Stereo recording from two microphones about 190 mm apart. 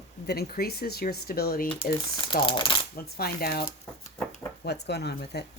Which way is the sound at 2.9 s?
55° left (ahead or behind).